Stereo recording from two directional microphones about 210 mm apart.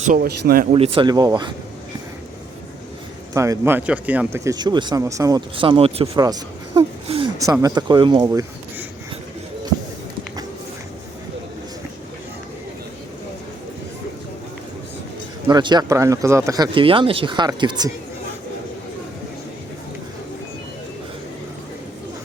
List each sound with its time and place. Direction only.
0.0 s speech: 40° right (ahead or behind)
0.7 s speech: 25° right (ahead or behind)
3.3 s speech: 15° right (ahead or behind)
15.4 s speech: 20° right (ahead or behind)